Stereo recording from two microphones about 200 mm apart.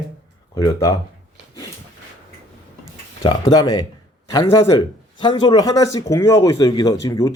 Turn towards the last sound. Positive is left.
turn(degrees=15)  # may be behind; listen again after turning